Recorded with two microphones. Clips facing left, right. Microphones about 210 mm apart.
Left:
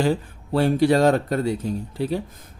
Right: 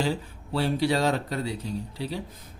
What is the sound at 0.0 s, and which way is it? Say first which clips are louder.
Speech: left 6 dB; 50° left (ahead or behind).